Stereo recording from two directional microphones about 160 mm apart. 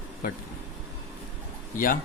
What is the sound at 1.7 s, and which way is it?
Speech, 60° left (ahead or behind).